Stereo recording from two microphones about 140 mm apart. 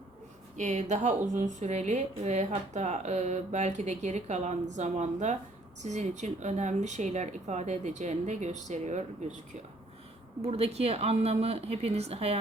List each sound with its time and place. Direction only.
0.5 s speech: 55° right (ahead or behind)
10.4 s a woman's voice: 45° right (ahead or behind)